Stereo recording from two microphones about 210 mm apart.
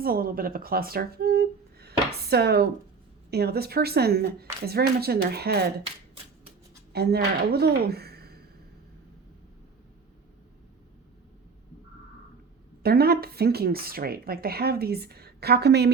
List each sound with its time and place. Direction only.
0.0 s speech: 45° right (ahead or behind)
6.9 s speech: 50° right (ahead or behind)
12.8 s speech: 50° right (ahead or behind)